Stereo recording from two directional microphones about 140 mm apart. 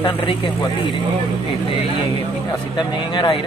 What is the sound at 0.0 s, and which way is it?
Speech, 40° left (ahead or behind).